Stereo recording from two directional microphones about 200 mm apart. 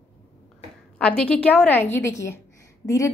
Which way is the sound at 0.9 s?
5° left (ahead or behind).